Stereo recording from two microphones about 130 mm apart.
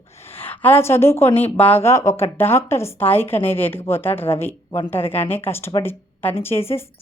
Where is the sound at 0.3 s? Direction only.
15° left (ahead or behind).